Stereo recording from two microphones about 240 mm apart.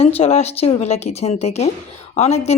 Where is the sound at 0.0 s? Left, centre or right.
Left.